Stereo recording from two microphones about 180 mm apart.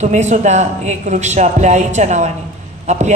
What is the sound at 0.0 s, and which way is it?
A man's voice, 40° right (ahead or behind).